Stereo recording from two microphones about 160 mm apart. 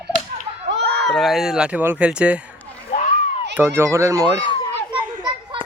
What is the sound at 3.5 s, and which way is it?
Speech, 15° right (ahead or behind).